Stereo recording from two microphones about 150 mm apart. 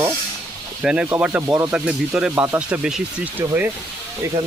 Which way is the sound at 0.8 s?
5° right (ahead or behind).